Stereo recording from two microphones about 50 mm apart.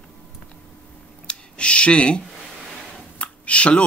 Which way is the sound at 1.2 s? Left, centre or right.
Left.